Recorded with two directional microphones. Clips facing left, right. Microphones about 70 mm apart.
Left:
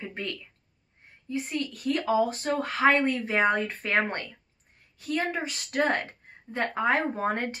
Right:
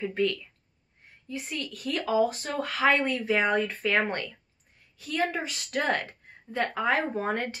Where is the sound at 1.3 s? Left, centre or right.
Left.